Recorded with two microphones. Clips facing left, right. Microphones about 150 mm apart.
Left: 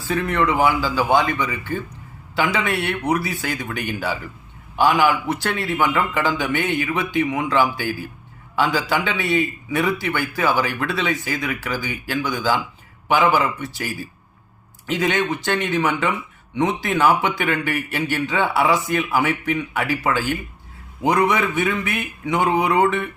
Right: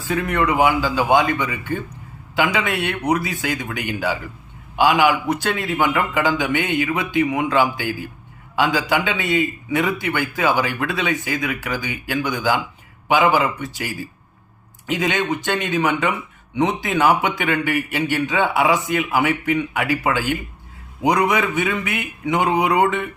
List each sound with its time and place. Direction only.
0.0 s a man's voice: 20° right (ahead or behind)